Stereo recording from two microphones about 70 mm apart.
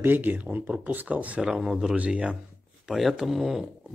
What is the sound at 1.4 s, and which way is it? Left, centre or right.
Speech, centre.